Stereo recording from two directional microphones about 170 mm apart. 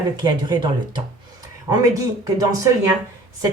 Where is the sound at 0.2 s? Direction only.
25° right (ahead or behind).